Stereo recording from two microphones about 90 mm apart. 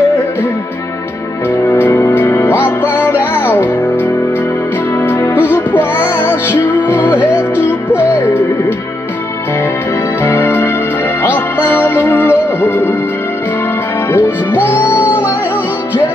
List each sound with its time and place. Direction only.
1.6 s music: 25° left (ahead or behind)
7.2 s music: 15° right (ahead or behind)
10.2 s music: 20° left (ahead or behind)
14.1 s music: 25° left (ahead or behind)